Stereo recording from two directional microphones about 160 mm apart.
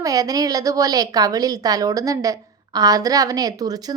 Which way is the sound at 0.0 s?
20° right (ahead or behind).